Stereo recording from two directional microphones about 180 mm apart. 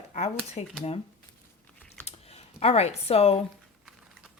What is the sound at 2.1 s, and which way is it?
Computer keyboard, 35° left (ahead or behind).